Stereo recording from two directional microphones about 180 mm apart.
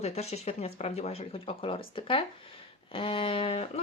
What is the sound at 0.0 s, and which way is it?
Speech, 35° left (ahead or behind).